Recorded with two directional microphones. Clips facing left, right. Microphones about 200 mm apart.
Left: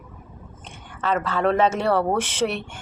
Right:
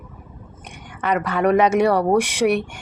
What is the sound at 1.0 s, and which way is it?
Speech, 15° right (ahead or behind).